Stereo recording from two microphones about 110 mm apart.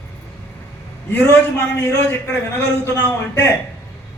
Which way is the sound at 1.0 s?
15° left (ahead or behind).